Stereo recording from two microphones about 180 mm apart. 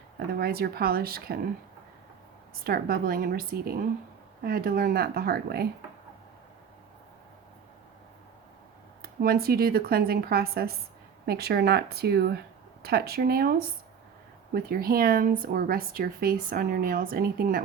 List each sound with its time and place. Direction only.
0.3 s speech: 60° right (ahead or behind)
2.6 s speech: 55° right (ahead or behind)
9.0 s speech: 55° right (ahead or behind)